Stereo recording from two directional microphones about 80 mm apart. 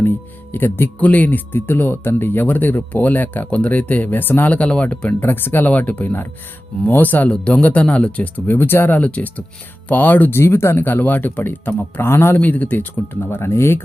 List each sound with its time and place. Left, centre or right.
0.5 s speech: left
4.5 s speech: centre
8.5 s speech: left
12.4 s speech: centre